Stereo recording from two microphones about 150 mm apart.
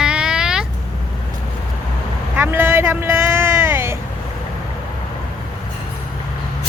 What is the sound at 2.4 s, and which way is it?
Vehicle, 15° right (ahead or behind).